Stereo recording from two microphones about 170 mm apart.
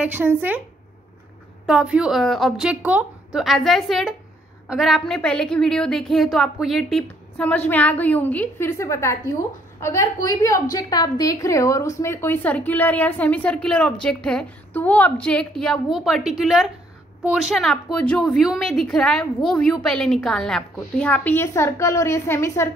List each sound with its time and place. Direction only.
0.0 s speech: 10° right (ahead or behind)
1.7 s a woman's voice: 5° right (ahead or behind); by 22.7 s 15° left (ahead or behind)